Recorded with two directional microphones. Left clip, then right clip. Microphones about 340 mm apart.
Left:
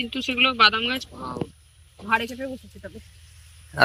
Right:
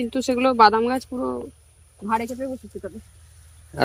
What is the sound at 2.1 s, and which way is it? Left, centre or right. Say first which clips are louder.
Speech: even; centre.